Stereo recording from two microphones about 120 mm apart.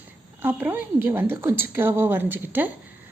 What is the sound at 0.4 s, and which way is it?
A woman's voice, 15° right (ahead or behind).